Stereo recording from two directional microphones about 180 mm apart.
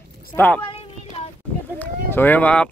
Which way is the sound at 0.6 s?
30° left (ahead or behind).